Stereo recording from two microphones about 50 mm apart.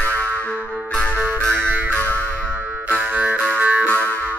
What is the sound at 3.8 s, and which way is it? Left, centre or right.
Music, left.